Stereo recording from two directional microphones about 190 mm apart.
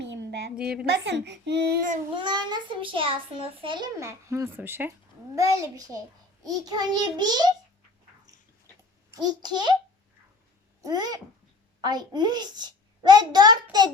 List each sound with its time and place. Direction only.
0.0 s a sound: 65° right (ahead or behind)
0.9 s a child's voice: 65° right (ahead or behind)
2.1 s a child's voice: 25° right (ahead or behind)
9.0 s a child's voice: 20° right (ahead or behind)
10.8 s a child's voice: 20° right (ahead or behind)